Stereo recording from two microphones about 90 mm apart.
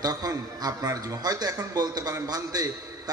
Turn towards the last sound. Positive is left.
turn(degrees=-45)  # may be behind; listen again after turning